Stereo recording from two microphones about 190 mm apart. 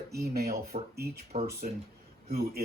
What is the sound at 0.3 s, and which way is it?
Speech, 55° right (ahead or behind).